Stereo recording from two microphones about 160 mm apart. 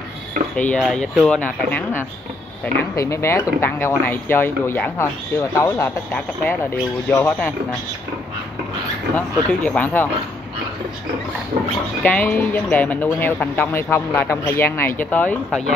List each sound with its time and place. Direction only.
0.6 s speech: 5° left (ahead or behind)
9.1 s speech: 10° left (ahead or behind)
12.0 s speech: 10° left (ahead or behind)